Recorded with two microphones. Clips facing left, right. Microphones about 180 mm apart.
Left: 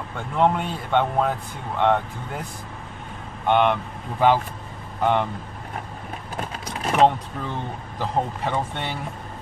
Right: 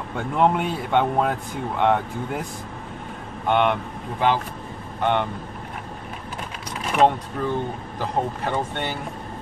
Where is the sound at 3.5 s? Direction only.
Centre (ahead or behind).